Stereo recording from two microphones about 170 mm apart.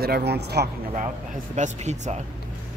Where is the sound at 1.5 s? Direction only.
45° right (ahead or behind).